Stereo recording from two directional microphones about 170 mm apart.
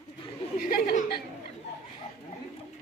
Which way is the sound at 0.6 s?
65° left (ahead or behind).